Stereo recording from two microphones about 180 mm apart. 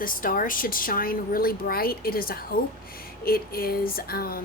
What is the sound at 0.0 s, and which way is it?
A woman's voice, 50° left (ahead or behind).